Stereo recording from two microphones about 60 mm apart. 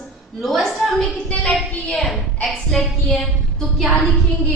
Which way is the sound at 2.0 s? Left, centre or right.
Centre.